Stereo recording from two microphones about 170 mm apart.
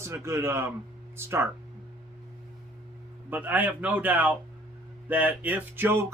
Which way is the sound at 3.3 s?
10° right (ahead or behind).